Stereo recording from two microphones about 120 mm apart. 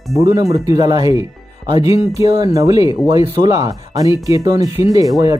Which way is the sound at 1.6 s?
35° right (ahead or behind).